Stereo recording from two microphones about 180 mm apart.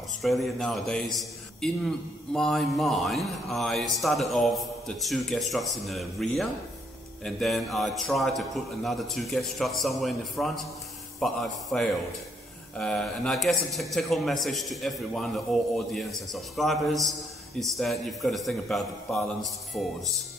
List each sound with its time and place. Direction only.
0.2 s a man's voice: centre (ahead or behind)